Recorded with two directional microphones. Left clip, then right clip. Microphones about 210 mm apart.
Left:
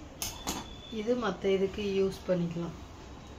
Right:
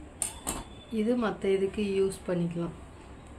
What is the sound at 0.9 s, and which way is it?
Speech, 50° right (ahead or behind).